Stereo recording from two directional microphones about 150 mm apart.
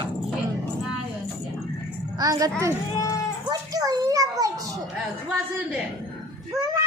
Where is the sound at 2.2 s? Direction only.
25° right (ahead or behind).